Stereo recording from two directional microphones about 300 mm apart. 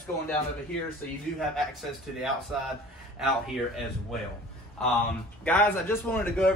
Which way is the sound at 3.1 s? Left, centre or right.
Centre.